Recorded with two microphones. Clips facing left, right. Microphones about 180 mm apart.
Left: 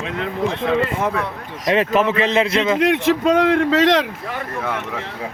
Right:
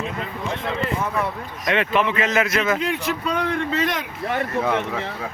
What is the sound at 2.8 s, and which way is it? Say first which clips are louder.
Speech: left 8 dB; 90° left.